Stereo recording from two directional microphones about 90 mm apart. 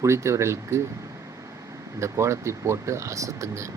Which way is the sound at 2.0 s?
30° right (ahead or behind).